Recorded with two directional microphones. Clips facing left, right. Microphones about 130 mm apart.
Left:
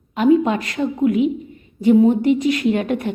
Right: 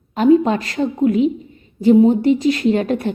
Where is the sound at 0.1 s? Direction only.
35° right (ahead or behind).